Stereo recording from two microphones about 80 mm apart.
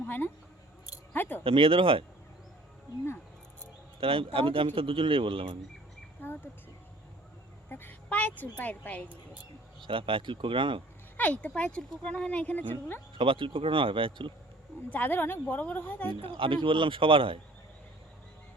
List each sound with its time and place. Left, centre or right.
1.1 s speech: left
1.5 s a man's voice: right
4.0 s a man's voice: right
6.2 s a woman's voice: left
7.7 s a woman's voice: left
9.8 s a man's voice: right
11.2 s speech: centre
13.1 s a man's voice: right
14.8 s a woman's voice: left
16.0 s a man's voice: right